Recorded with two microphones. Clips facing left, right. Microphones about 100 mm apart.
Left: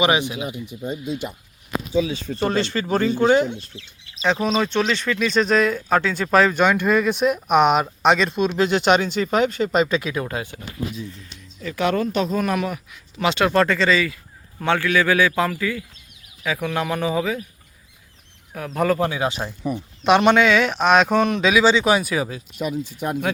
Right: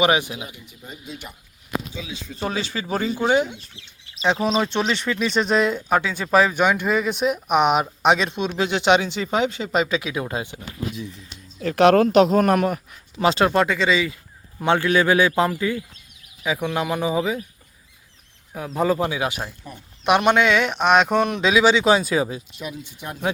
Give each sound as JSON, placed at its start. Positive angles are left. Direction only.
{"t": 0.9, "sound": "speech", "side_deg": 25}
{"t": 2.3, "sound": "speech", "side_deg": -5}
{"t": 4.2, "sound": "speech", "side_deg": -20}
{"t": 9.6, "sound": "speech", "side_deg": -5}
{"t": 11.6, "sound": "a man's voice", "side_deg": -65}
{"t": 13.5, "sound": "a man's voice", "side_deg": -15}
{"t": 18.5, "sound": "speech", "side_deg": -15}
{"t": 19.6, "sound": "speech", "side_deg": 90}
{"t": 20.1, "sound": "speech", "side_deg": -15}
{"t": 22.5, "sound": "speech", "side_deg": 45}